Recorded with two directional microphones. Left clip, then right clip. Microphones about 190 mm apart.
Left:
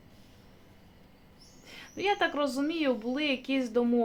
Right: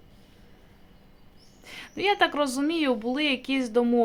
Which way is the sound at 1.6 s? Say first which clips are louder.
Right 4 dB; 25° right (ahead or behind).